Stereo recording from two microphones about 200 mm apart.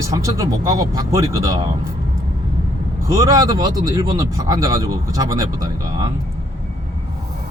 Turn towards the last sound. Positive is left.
turn(degrees=-20)  # may be behind; listen again after turning